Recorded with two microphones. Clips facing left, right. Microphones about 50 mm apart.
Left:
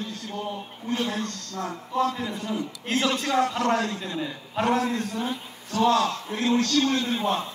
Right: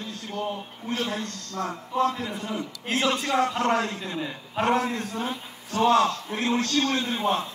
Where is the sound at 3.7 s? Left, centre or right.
Right.